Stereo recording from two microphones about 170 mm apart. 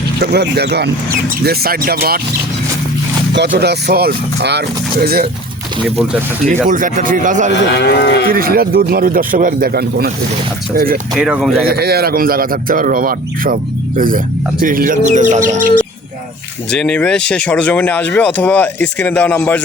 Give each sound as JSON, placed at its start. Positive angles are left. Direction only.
{"t": 0.2, "sound": "speech", "side_deg": -75}
{"t": 1.5, "sound": "speech", "side_deg": -60}
{"t": 3.3, "sound": "speech", "side_deg": -90}
{"t": 6.5, "sound": "bird", "side_deg": -50}
{"t": 7.8, "sound": "moo", "side_deg": 80}
{"t": 8.3, "sound": "speech", "side_deg": -60}
{"t": 11.1, "sound": "speech", "side_deg": -5}
{"t": 11.6, "sound": "speech", "side_deg": -65}
{"t": 14.6, "sound": "bird", "side_deg": -55}
{"t": 16.7, "sound": "speech", "side_deg": 5}